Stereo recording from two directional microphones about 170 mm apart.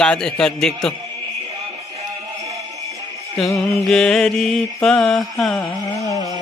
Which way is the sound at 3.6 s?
5° left (ahead or behind).